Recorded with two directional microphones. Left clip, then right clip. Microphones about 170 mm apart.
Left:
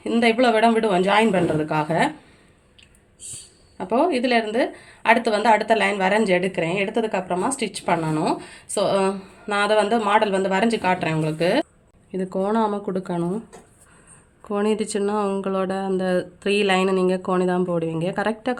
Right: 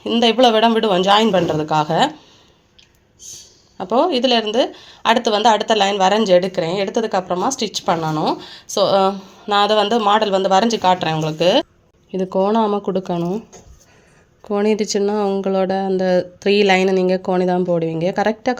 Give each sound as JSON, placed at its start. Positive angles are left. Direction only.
{"t": 0.0, "sound": "speech", "side_deg": -30}
{"t": 3.8, "sound": "speech", "side_deg": -30}
{"t": 14.4, "sound": "speech", "side_deg": -20}